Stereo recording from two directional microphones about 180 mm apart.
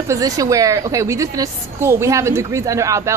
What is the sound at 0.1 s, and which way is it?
A woman's voice, 20° right (ahead or behind).